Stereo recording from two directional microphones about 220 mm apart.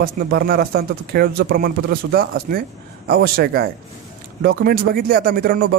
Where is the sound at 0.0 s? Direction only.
45° right (ahead or behind).